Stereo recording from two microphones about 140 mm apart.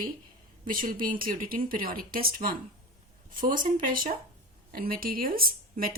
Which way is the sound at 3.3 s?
80° right.